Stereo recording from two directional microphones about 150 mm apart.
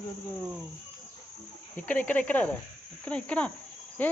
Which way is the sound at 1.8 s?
10° left (ahead or behind).